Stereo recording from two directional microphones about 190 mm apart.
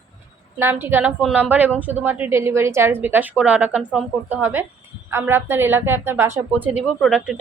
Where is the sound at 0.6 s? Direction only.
10° right (ahead or behind).